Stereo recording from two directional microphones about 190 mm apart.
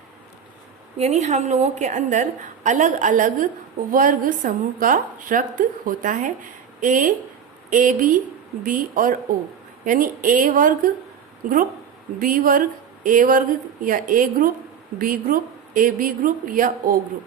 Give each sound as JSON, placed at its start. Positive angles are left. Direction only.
{"t": 0.9, "sound": "a woman's voice", "side_deg": -35}
{"t": 12.2, "sound": "a sound", "side_deg": -45}
{"t": 13.8, "sound": "a woman's voice", "side_deg": -45}